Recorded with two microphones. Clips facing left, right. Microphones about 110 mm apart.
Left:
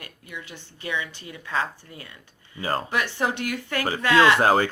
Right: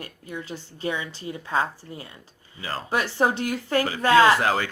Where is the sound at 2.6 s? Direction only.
40° left (ahead or behind).